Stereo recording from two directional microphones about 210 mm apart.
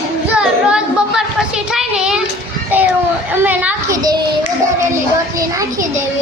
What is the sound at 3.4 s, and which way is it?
Speech, 5° right (ahead or behind).